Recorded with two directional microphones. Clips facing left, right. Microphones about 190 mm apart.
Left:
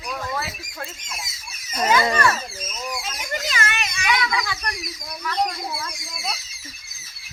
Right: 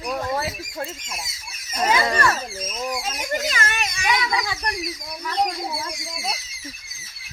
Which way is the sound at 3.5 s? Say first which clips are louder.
Right 1 dB; 45° right (ahead or behind).